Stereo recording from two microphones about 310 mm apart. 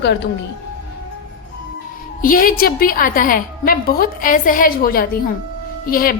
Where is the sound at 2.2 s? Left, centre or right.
Left.